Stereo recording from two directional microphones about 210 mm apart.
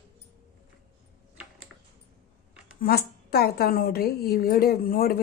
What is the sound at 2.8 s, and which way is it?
A woman's voice, 45° left (ahead or behind).